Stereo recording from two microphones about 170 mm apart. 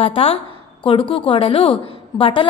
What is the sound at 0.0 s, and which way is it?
A woman's voice, 35° left (ahead or behind).